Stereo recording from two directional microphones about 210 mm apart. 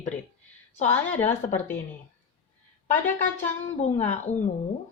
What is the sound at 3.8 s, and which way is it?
Speech, 35° left (ahead or behind).